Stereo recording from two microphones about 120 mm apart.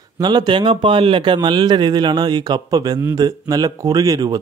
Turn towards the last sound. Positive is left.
turn(degrees=-30)  # may be behind; listen again after turning